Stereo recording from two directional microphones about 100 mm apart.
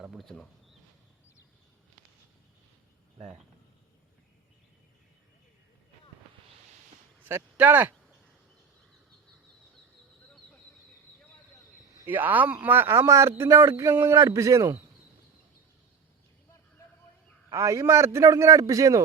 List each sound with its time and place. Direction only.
0.0 s speech: centre (ahead or behind)
7.3 s speech: 20° right (ahead or behind)
12.0 s a man's voice: 20° right (ahead or behind)
17.5 s a man's voice: 30° right (ahead or behind)